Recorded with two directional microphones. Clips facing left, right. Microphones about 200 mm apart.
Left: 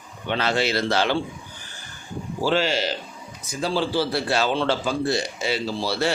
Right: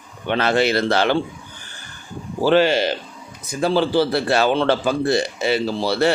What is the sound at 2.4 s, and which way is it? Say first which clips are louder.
A man's voice: right 7 dB; 60° right (ahead or behind).